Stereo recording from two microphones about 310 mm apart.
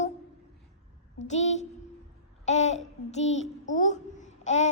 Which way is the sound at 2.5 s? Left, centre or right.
Left.